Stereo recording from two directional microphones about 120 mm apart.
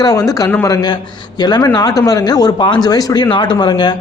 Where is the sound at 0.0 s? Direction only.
30° left (ahead or behind).